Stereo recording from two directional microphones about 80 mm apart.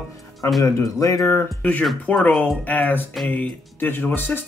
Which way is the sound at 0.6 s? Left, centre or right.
Left.